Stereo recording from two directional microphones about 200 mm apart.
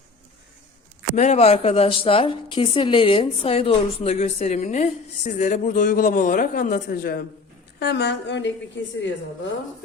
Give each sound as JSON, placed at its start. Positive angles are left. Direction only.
{"t": 1.1, "sound": "a woman's voice", "side_deg": 35}